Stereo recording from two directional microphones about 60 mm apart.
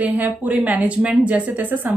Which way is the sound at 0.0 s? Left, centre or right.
Right.